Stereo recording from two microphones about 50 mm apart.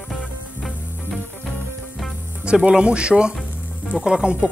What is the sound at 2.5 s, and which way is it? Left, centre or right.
Speech, centre.